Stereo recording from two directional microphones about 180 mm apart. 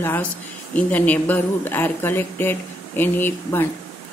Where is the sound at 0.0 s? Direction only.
10° left (ahead or behind).